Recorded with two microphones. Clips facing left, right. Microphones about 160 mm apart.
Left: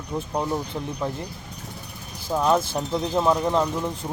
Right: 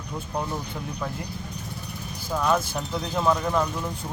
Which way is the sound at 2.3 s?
25° left (ahead or behind).